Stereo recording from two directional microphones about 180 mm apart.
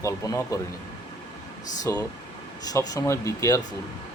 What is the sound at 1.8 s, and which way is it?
Speech, 20° left (ahead or behind).